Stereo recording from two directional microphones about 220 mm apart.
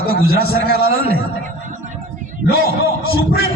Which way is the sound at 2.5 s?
45° right (ahead or behind).